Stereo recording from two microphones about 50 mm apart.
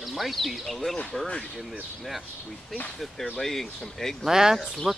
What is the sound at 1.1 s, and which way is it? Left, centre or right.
Speech, centre.